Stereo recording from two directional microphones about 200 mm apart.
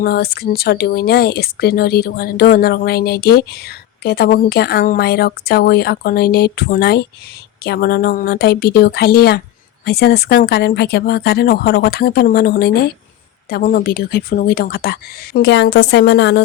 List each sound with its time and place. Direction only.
0.0 s speech: 50° left (ahead or behind)